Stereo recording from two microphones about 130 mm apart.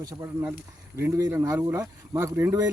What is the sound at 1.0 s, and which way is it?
Speech, 15° right (ahead or behind).